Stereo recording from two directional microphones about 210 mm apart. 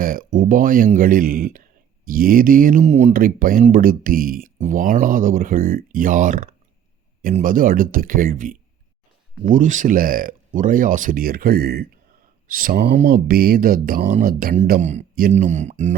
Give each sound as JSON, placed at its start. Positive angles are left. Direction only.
{"t": 0.0, "sound": "speech", "side_deg": -40}